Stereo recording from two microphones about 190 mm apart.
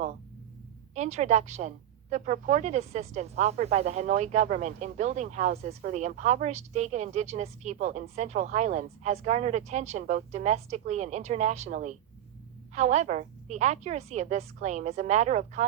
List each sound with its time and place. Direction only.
0.9 s a woman's voice: 35° right (ahead or behind)